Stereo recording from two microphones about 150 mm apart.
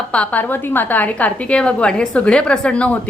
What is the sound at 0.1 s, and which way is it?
A woman's voice, 10° left (ahead or behind).